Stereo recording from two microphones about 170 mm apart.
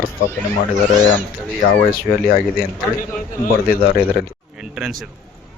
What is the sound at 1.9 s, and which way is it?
Speech, 60° left (ahead or behind).